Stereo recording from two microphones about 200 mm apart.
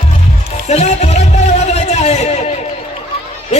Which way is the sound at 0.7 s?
35° left (ahead or behind).